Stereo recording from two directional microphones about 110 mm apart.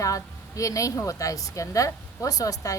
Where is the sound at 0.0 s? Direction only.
30° left (ahead or behind).